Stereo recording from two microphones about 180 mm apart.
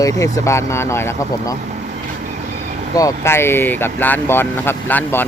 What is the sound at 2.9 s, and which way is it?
Speech, 15° left (ahead or behind).